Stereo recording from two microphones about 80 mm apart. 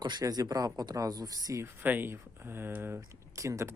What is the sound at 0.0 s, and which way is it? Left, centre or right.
Speech, right.